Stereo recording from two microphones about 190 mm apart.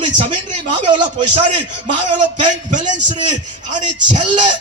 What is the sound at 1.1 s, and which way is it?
Speech, 35° right (ahead or behind).